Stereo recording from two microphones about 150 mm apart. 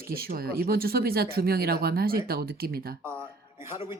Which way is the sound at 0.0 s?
80° right.